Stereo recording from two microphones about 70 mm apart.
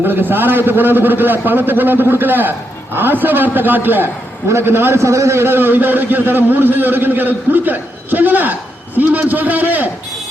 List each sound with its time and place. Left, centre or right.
0.0 s a man's voice: right